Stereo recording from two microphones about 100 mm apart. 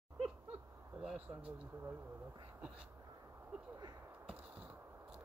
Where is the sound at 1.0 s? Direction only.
10° right (ahead or behind).